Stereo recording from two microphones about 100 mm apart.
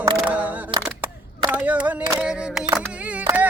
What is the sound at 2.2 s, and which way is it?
Single-lens reflex camera, 5° right (ahead or behind).